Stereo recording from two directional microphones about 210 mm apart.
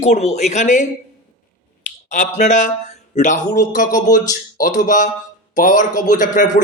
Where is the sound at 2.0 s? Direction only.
35° left (ahead or behind).